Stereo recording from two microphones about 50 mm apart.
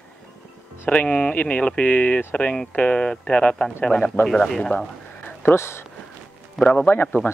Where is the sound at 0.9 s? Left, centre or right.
Left; by 4.7 s centre.